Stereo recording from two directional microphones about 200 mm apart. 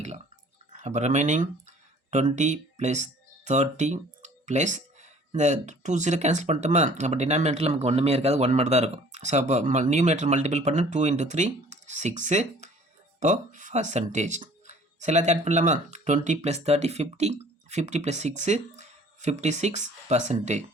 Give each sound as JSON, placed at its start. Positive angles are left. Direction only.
{"t": 0.7, "sound": "speech", "side_deg": -35}